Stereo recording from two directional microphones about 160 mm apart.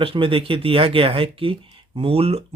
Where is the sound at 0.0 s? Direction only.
35° right (ahead or behind).